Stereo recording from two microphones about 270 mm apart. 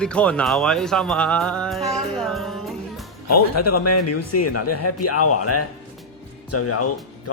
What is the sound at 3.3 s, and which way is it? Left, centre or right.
Speech, left.